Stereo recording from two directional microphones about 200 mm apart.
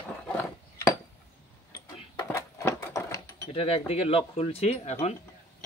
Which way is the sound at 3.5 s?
30° left (ahead or behind).